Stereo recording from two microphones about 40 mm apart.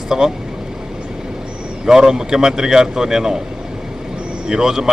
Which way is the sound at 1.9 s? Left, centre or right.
Centre.